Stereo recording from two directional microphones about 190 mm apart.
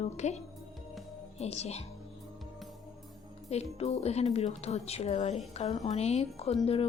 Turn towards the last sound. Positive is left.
turn(degrees=30)  # may be behind; listen again after turning